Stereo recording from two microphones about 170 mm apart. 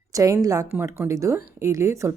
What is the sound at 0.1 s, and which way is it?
A woman's voice, 20° right (ahead or behind).